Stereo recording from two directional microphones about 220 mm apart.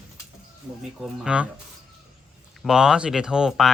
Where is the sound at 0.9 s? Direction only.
5° right (ahead or behind).